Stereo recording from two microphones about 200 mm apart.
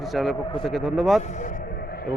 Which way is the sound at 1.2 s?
40° left (ahead or behind).